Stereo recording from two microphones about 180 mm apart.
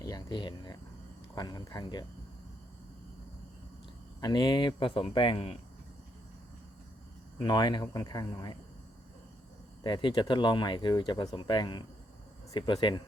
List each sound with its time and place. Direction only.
0.0 s a sound: 20° left (ahead or behind)
1.4 s speech: 25° left (ahead or behind)
4.2 s speech: 25° left (ahead or behind)
7.3 s speech: 25° left (ahead or behind)
9.8 s speech: 25° left (ahead or behind)